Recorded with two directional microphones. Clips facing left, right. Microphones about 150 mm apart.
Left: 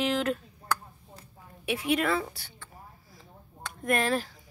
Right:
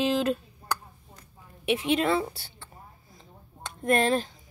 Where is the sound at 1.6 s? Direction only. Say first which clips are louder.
Right 3 dB; 25° right (ahead or behind).